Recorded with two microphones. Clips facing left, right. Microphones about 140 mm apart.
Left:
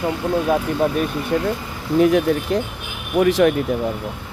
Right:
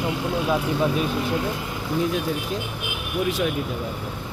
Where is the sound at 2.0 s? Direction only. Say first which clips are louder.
Left 10 dB; 70° left (ahead or behind).